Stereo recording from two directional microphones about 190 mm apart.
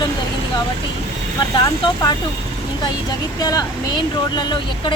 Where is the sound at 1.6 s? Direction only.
20° left (ahead or behind).